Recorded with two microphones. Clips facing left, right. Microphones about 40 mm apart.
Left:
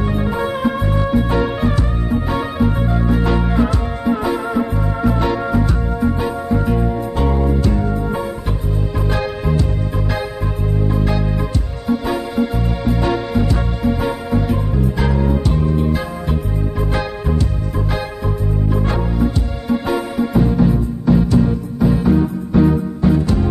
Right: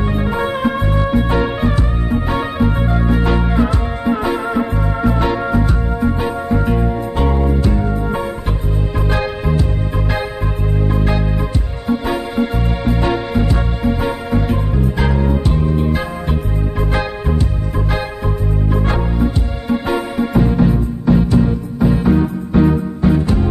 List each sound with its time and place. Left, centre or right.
0.3 s music: right
2.2 s music: right
4.0 s music: right
12.4 s music: right
14.3 s music: right
18.9 s music: right
20.3 s music: right
21.2 s music: right
22.0 s music: right